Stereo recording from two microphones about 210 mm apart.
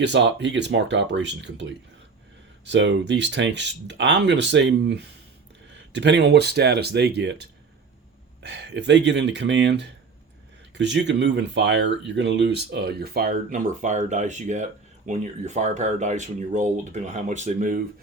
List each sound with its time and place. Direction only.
0.0 s speech: 55° right (ahead or behind); by 17.8 s 40° right (ahead or behind)